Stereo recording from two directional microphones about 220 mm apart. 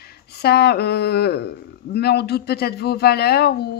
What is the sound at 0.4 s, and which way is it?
Speech, 45° left (ahead or behind).